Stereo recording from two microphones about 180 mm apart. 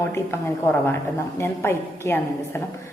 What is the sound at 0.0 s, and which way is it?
Speech, 15° left (ahead or behind).